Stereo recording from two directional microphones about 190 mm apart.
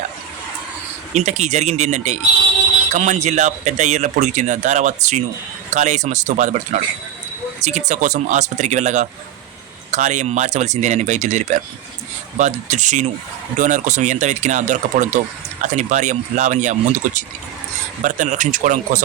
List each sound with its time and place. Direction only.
1.1 s speech: 35° right (ahead or behind)
7.6 s speech: 40° right (ahead or behind)